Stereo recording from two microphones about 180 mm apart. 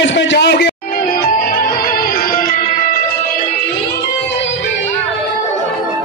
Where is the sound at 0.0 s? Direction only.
90° left; by 2.6 s 50° left (ahead or behind).